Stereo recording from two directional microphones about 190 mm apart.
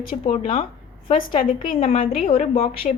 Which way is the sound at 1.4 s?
45° left (ahead or behind).